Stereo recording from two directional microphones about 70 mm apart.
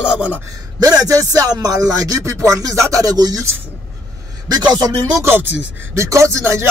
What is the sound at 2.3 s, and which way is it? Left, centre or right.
Speech, right.